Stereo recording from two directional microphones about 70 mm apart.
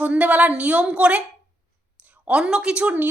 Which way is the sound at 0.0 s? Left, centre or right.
Right.